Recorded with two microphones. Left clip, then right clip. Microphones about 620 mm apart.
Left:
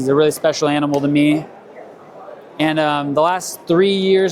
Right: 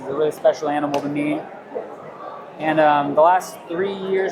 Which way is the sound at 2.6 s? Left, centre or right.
Left.